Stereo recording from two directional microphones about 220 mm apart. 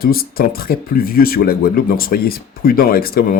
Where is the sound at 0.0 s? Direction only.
40° left (ahead or behind).